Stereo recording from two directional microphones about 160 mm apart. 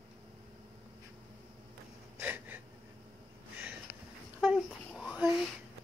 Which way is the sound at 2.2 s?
10° right (ahead or behind).